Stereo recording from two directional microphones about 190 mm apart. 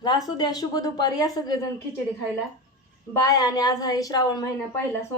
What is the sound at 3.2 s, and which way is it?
A woman's voice, 20° left (ahead or behind).